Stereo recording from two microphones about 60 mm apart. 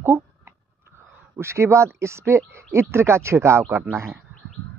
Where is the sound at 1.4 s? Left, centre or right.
Right.